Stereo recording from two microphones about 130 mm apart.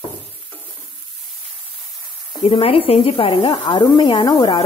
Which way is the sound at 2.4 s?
45° left (ahead or behind).